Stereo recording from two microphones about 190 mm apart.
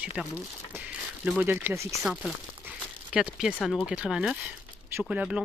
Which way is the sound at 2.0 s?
Centre (ahead or behind).